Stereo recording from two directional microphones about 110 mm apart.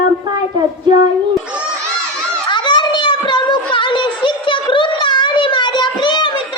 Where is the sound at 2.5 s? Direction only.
45° left (ahead or behind).